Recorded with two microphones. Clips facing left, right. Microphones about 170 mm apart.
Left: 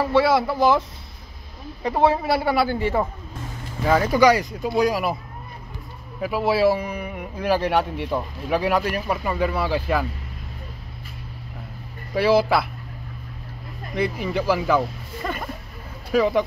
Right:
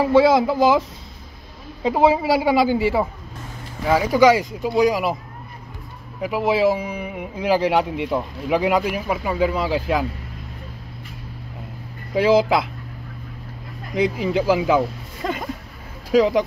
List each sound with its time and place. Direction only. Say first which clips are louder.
0.0 s speech: right 4 dB; 15° right (ahead or behind)
6.2 s speech: right 1 dB; 15° right (ahead or behind)
12.1 s speech: right 2 dB; 15° right (ahead or behind)
14.3 s speech: right 2 dB; 10° right (ahead or behind)